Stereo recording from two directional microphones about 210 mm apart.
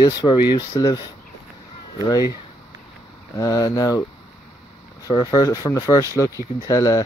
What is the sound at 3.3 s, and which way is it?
Speech, 20° left (ahead or behind).